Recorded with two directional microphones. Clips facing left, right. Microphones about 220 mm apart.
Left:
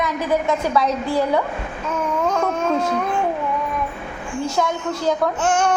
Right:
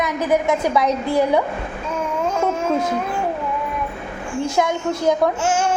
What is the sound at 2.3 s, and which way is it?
Baby cry, 5° right (ahead or behind).